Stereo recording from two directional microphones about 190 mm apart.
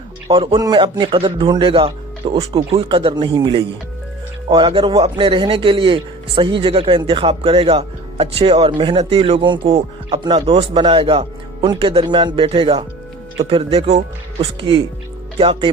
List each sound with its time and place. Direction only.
0.3 s speech: 25° right (ahead or behind)